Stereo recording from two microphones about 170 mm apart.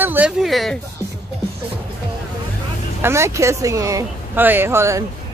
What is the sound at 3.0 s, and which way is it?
Speech, 15° right (ahead or behind).